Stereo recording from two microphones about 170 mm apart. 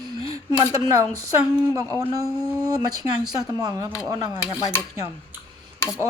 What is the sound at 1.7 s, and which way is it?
Speech, 20° right (ahead or behind).